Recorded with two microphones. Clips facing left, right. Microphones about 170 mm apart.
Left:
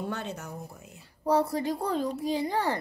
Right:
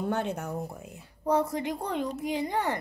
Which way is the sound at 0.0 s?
55° right (ahead or behind).